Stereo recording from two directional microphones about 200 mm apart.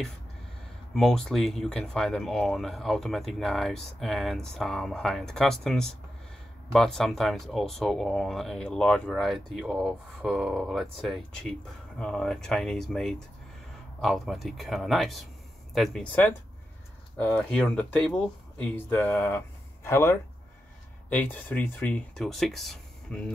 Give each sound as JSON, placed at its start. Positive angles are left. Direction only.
{"t": 0.9, "sound": "speech", "side_deg": 0}